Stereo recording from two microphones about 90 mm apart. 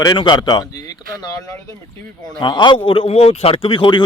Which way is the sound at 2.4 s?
60° left (ahead or behind).